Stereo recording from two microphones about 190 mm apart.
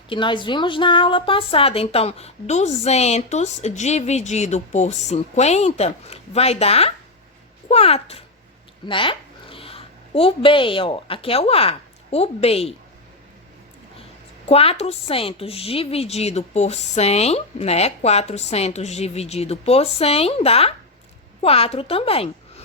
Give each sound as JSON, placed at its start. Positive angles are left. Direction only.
{"t": 0.1, "sound": "a woman's voice", "side_deg": 25}
{"t": 14.4, "sound": "a woman's voice", "side_deg": 30}